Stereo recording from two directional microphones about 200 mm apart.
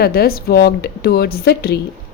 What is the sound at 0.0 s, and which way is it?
Speech, 50° left (ahead or behind).